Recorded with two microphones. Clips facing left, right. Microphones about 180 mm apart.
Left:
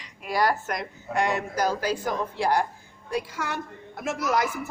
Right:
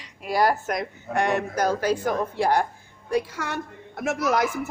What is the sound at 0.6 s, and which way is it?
Speech, 55° right (ahead or behind).